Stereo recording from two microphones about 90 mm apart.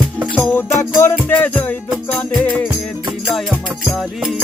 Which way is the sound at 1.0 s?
25° left (ahead or behind).